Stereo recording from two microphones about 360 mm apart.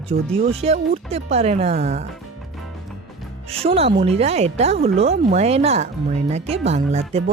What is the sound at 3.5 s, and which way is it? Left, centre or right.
Speech, centre.